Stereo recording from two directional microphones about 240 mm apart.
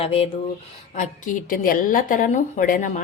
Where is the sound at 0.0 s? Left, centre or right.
Left.